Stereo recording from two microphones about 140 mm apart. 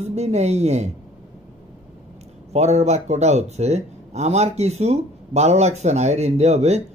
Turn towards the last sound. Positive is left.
turn(degrees=-50)  # may be behind; listen again after turning